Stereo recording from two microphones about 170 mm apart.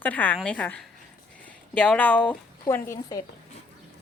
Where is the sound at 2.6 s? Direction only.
20° left (ahead or behind).